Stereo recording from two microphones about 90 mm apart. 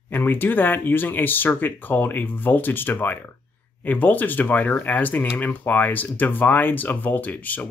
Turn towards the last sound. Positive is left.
turn(degrees=20)  # may be behind; listen again after turning